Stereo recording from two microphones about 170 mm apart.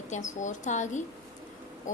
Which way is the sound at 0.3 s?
45° left (ahead or behind).